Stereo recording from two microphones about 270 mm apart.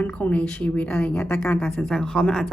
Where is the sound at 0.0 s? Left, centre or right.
Centre.